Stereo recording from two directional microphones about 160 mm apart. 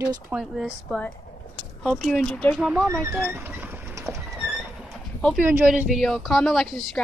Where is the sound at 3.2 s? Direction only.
15° right (ahead or behind).